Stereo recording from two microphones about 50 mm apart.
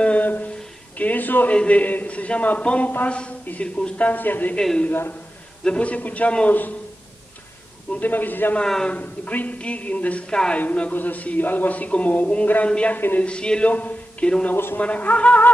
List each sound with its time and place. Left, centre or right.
0.0 s a sound: left
0.9 s a man's voice: left
1.5 s a man's voice: left
4.1 s speech: left
4.6 s a man's voice: centre; by 6.7 s left
8.0 s a man's voice: left
10.3 s a man's voice: centre
10.6 s a man's voice: left
12.9 s speech: left
13.2 s a man's voice: centre
13.7 s a man's voice: left
14.5 s a man's voice: left
14.8 s a man's voice: left